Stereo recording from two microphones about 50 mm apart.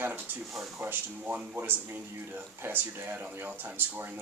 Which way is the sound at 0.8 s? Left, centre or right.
Right.